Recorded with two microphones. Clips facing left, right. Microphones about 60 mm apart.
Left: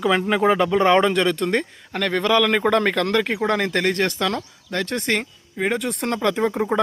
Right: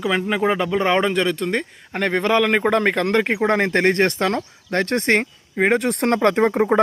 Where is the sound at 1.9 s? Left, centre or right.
Right.